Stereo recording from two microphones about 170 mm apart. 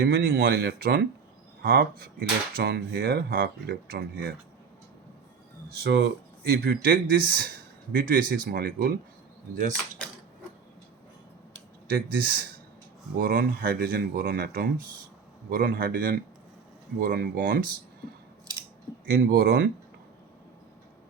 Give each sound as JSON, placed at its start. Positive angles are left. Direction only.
{"t": 0.0, "sound": "speech", "side_deg": -65}
{"t": 5.8, "sound": "speech", "side_deg": -80}
{"t": 9.6, "sound": "speech", "side_deg": -50}
{"t": 11.9, "sound": "speech", "side_deg": -65}
{"t": 19.0, "sound": "speech", "side_deg": -65}